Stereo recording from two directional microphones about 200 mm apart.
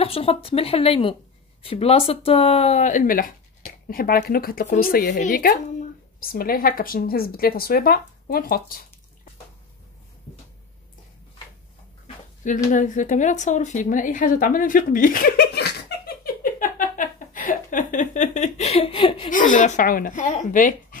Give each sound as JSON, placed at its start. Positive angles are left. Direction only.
{"t": 0.0, "sound": "speech", "side_deg": 30}
{"t": 12.4, "sound": "a sound", "side_deg": 40}
{"t": 19.3, "sound": "speech", "side_deg": 40}